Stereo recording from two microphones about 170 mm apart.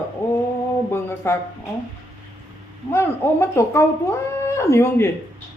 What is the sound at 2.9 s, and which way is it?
Speech, 15° left (ahead or behind).